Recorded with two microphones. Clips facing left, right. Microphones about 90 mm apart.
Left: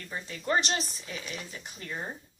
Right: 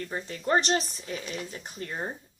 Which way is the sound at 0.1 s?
35° right (ahead or behind).